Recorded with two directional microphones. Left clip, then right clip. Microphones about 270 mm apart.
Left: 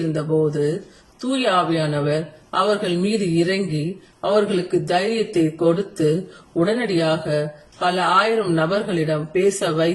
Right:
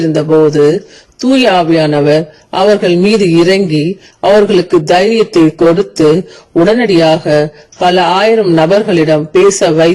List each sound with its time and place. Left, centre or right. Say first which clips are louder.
0.1 s speech: right 13 dB; right